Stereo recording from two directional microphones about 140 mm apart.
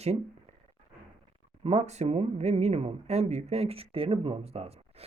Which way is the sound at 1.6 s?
50° right (ahead or behind).